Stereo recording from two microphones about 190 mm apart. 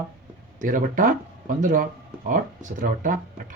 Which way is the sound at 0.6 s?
45° right (ahead or behind).